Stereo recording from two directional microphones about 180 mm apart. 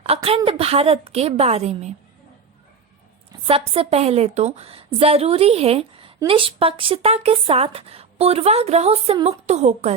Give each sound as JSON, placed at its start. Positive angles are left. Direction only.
{"t": 0.0, "sound": "speech", "side_deg": -35}
{"t": 3.4, "sound": "speech", "side_deg": -30}